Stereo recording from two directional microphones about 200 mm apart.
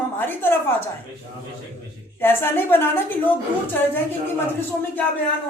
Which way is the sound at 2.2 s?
10° left (ahead or behind).